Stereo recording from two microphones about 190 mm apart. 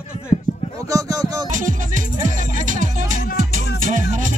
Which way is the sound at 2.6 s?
40° right (ahead or behind).